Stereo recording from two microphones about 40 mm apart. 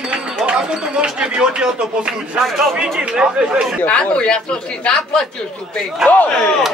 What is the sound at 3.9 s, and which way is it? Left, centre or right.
A man's voice, left.